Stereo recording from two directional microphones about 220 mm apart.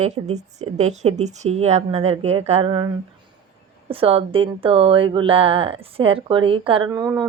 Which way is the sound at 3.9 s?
25° right (ahead or behind).